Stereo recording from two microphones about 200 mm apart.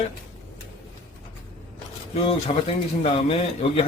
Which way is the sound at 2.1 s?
30° left (ahead or behind).